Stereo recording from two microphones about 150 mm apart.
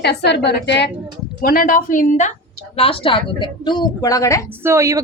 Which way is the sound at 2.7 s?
40° left (ahead or behind).